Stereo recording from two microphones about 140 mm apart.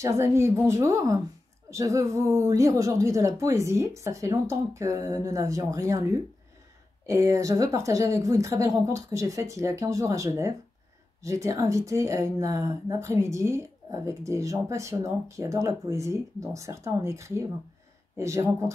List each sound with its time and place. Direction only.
0.0 s speech: 20° right (ahead or behind)
7.1 s speech: 25° right (ahead or behind)